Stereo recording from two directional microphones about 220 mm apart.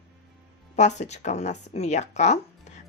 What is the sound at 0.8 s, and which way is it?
Speech, 30° left (ahead or behind).